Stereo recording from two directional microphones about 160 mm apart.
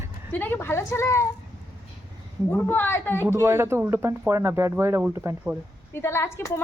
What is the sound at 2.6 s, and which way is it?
Speech, 10° left (ahead or behind).